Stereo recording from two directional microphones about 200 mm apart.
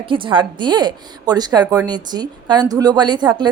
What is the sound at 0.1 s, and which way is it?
Speech, 25° right (ahead or behind).